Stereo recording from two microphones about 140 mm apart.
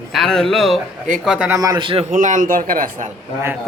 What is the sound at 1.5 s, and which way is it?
Speech, 25° right (ahead or behind).